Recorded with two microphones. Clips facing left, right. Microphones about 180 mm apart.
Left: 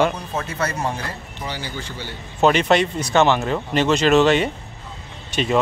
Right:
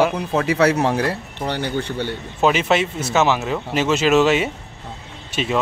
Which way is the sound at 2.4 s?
5° right (ahead or behind).